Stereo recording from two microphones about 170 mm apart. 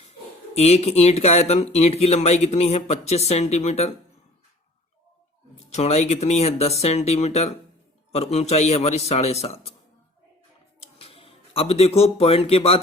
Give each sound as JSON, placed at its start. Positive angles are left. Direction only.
{"t": 0.0, "sound": "speech", "side_deg": 40}
{"t": 5.5, "sound": "speech", "side_deg": 40}
{"t": 10.8, "sound": "a sound", "side_deg": 35}